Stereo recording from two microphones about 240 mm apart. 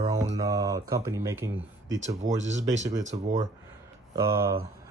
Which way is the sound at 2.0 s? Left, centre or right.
Right.